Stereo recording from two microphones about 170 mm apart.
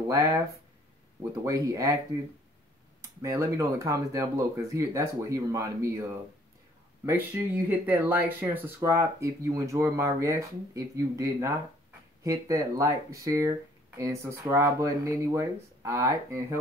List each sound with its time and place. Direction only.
0.1 s speech: 20° right (ahead or behind)
1.4 s speech: 20° right (ahead or behind)
3.0 s speech: 20° right (ahead or behind)